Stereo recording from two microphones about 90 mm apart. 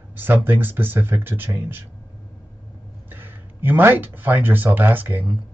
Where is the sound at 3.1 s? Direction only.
20° right (ahead or behind).